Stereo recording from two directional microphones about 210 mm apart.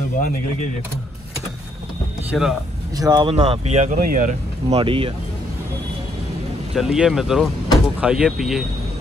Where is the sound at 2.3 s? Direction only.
Centre (ahead or behind).